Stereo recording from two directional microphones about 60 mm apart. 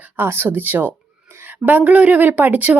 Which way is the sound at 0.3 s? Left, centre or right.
Right.